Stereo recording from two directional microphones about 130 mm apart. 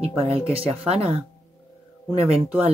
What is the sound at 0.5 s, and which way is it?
Speech, 50° right (ahead or behind).